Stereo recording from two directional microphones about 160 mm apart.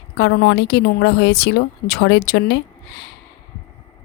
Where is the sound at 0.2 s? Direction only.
90° left.